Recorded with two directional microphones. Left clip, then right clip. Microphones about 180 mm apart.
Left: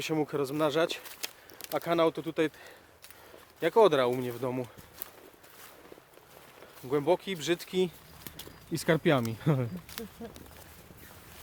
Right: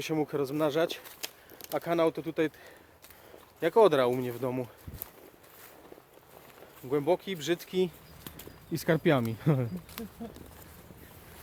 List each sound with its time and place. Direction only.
0.0 s speech: 15° left (ahead or behind)
1.2 s a sound: 30° left (ahead or behind)
1.6 s speech: 15° left (ahead or behind)
6.8 s speech: 25° left (ahead or behind); by 9.6 s 10° left (ahead or behind)